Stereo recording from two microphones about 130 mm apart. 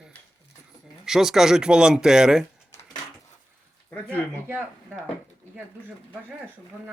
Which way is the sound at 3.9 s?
10° left (ahead or behind).